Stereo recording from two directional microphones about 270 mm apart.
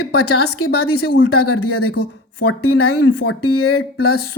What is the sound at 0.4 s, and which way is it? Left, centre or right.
Speech, left.